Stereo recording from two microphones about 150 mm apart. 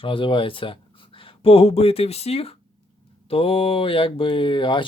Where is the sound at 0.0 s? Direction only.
35° left (ahead or behind).